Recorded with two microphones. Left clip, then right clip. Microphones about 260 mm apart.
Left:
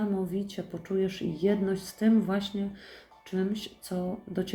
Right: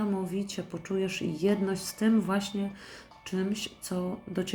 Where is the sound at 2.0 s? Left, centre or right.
Centre.